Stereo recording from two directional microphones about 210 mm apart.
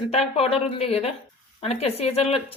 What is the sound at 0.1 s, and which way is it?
Speech, 30° left (ahead or behind).